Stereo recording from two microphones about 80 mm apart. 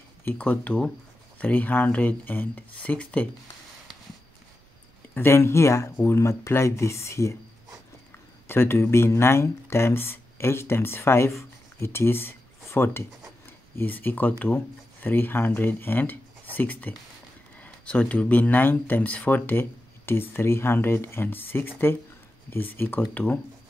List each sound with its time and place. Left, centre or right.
0.2 s speech: left
5.1 s speech: left
8.5 s speech: left